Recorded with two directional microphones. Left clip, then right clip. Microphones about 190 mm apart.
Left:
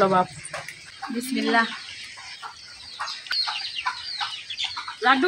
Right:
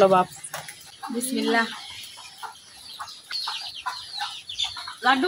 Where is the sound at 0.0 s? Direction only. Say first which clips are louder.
Right 2 dB; 15° right (ahead or behind).